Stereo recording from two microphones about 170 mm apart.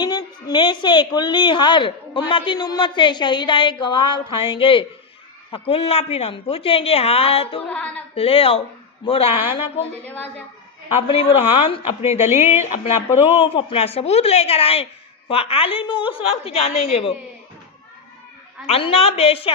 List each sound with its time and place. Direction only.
0.0 s a woman's voice: 20° left (ahead or behind)
7.7 s a woman's voice: 10° left (ahead or behind)
8.1 s a woman's voice: 35° left (ahead or behind)
10.9 s a woman's voice: 35° left (ahead or behind)
13.3 s a woman's voice: 35° left (ahead or behind)
18.6 s a woman's voice: 35° left (ahead or behind)